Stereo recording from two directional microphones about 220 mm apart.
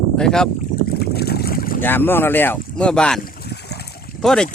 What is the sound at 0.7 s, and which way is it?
Boat, 45° left (ahead or behind).